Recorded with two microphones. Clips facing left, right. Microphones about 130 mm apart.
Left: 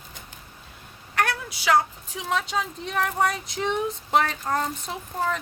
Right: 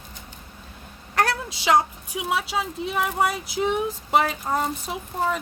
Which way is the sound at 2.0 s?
10° right (ahead or behind).